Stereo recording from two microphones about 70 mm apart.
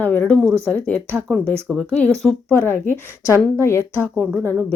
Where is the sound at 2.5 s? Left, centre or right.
Left.